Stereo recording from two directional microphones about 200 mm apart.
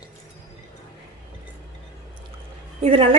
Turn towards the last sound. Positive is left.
turn(degrees=-30)  # may be behind; listen again after turning